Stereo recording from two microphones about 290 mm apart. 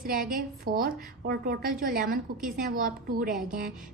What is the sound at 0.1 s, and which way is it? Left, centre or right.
A woman's voice, right.